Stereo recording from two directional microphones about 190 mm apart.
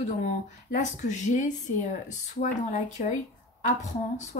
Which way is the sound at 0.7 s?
40° left (ahead or behind).